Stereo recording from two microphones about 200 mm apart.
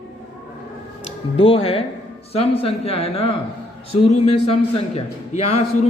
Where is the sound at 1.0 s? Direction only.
30° left (ahead or behind).